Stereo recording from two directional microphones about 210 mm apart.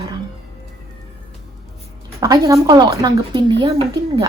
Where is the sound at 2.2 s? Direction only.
15° right (ahead or behind).